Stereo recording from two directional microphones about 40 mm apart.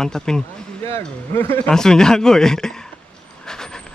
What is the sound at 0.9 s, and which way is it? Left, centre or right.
Speech, left.